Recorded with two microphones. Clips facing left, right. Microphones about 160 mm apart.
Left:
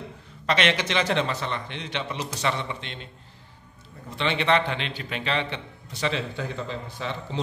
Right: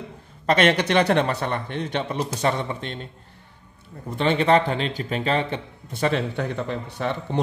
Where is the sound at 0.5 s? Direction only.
45° right (ahead or behind).